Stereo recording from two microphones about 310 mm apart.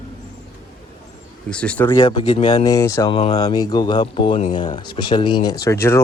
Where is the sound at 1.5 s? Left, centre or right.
Centre.